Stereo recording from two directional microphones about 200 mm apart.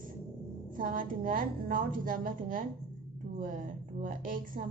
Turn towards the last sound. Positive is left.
turn(degrees=-45)  # may be behind; listen again after turning